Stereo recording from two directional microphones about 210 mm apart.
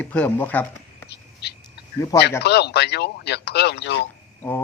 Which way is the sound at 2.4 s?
50° left (ahead or behind).